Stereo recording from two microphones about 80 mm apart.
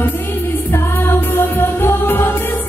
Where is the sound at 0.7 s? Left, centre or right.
Left.